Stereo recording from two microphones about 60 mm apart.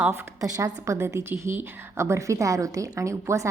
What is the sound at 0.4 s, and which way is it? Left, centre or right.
A woman's voice, right.